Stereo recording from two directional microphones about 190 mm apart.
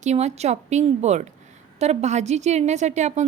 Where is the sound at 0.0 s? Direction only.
35° right (ahead or behind).